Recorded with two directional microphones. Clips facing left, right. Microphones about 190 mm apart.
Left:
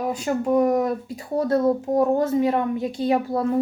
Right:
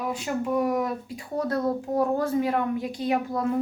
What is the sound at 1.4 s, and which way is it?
A woman's voice, 25° left (ahead or behind).